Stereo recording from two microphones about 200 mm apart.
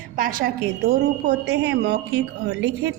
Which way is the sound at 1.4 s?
60° right (ahead or behind).